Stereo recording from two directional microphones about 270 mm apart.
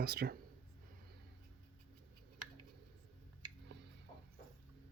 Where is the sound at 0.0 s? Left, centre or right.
Right.